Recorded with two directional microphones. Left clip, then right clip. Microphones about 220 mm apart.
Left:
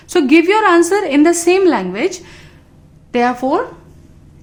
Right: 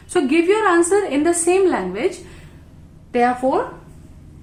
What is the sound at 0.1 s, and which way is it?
A woman's voice, 45° left (ahead or behind).